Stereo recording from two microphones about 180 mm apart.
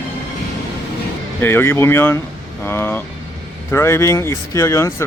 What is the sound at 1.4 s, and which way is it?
Speech, 15° left (ahead or behind).